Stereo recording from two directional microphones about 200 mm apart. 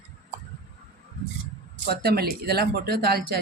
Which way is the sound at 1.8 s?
50° right (ahead or behind).